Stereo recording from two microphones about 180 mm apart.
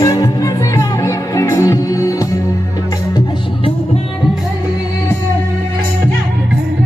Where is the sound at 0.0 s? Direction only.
20° left (ahead or behind).